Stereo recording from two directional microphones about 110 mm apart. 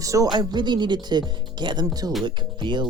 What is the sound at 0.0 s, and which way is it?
Speech, 30° right (ahead or behind).